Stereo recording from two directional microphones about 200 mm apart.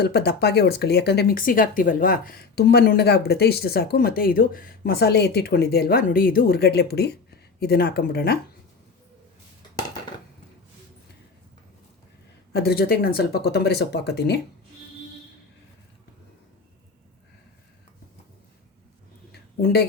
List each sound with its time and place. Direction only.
0.0 s speech: 55° left (ahead or behind)
12.5 s speech: 50° left (ahead or behind)
19.3 s a sound: 55° left (ahead or behind)